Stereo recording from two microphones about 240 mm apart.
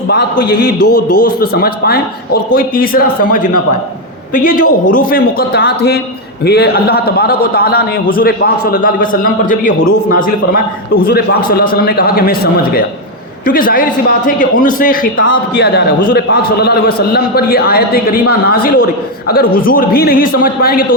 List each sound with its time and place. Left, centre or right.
0.8 s a man's voice: left
1.2 s a man's voice: left